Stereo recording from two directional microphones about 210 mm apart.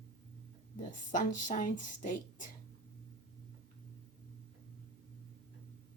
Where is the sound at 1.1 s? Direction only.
35° left (ahead or behind).